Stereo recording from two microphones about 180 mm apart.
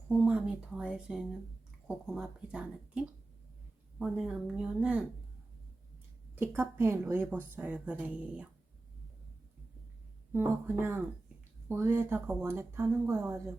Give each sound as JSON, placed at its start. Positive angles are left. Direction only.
{"t": 0.1, "sound": "speech", "side_deg": -5}
{"t": 6.3, "sound": "a woman's voice", "side_deg": -10}
{"t": 10.3, "sound": "a woman's voice", "side_deg": -10}